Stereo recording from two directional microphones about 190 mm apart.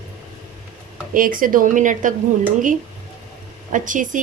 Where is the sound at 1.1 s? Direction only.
45° right (ahead or behind).